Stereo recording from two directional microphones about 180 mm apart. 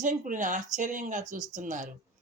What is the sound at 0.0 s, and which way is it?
Speech, 45° right (ahead or behind).